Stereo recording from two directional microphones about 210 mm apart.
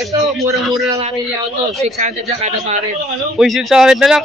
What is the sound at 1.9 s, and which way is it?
Speech, 35° right (ahead or behind).